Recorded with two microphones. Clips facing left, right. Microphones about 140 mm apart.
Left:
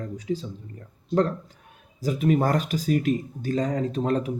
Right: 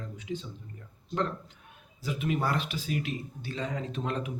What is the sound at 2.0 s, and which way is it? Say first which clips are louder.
Speech: left 8 dB; 40° left (ahead or behind).